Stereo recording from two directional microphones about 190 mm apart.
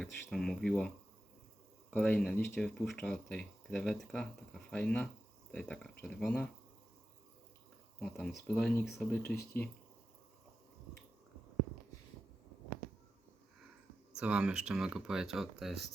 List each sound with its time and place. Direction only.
0.0 s speech: 5° left (ahead or behind)
7.9 s speech: 5° left (ahead or behind)
9.2 s speech: 55° left (ahead or behind)
14.2 s speech: 5° right (ahead or behind)